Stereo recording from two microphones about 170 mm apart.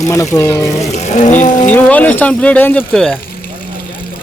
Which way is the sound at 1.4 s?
45° left (ahead or behind).